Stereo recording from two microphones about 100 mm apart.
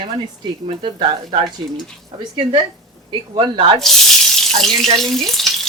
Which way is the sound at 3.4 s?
55° right (ahead or behind).